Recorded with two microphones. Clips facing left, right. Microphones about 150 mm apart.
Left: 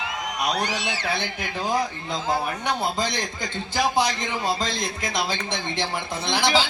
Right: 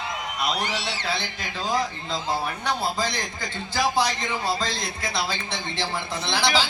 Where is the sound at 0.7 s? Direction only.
15° left (ahead or behind).